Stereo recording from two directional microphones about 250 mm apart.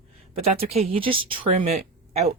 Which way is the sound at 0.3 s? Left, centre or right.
Right.